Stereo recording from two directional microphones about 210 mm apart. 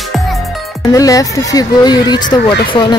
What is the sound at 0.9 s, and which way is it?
A woman's voice, 15° left (ahead or behind).